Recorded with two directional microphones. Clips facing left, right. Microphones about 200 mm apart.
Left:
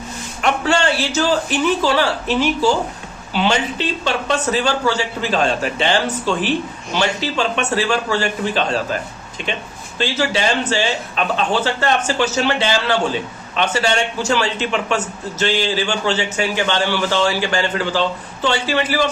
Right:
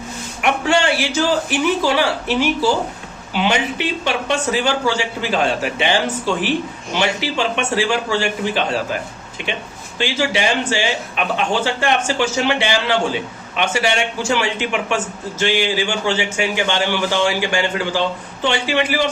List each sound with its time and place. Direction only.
0.4 s speech: 15° right (ahead or behind)